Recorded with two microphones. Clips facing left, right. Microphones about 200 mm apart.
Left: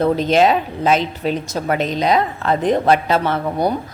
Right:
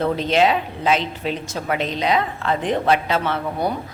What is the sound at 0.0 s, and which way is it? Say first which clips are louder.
Speech: left 4 dB; 45° left (ahead or behind).